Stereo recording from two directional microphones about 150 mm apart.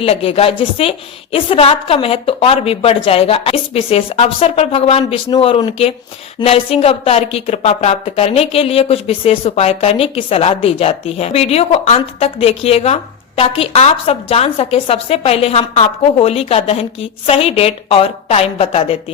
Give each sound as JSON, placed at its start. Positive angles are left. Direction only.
{"t": 0.0, "sound": "a woman's voice", "side_deg": 40}